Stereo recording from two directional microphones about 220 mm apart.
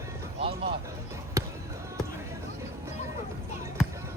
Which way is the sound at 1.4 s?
15° right (ahead or behind).